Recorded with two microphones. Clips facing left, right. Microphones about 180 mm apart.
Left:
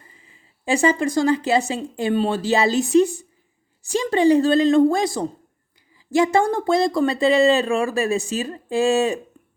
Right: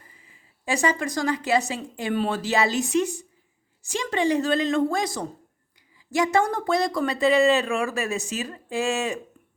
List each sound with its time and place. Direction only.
0.2 s speech: 30° left (ahead or behind)